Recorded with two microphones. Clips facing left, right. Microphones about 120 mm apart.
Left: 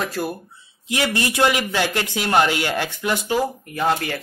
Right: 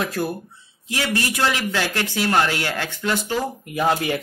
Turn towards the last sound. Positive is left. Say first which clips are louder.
# right 1 dB
turn(degrees=-15)  # may be behind; listen again after turning